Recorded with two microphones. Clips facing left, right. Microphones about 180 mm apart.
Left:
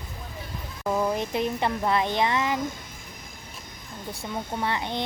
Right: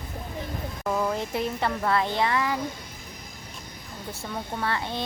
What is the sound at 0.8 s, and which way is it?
Speech, 15° left (ahead or behind).